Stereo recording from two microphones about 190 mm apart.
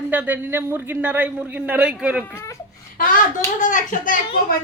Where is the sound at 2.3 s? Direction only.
15° left (ahead or behind).